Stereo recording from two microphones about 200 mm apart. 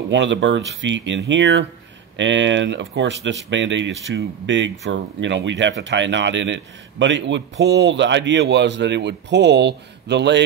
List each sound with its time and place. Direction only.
0.1 s speech: 65° right (ahead or behind)